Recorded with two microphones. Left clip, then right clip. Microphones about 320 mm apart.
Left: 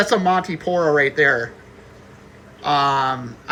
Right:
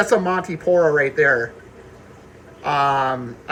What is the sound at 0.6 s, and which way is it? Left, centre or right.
Speech, centre.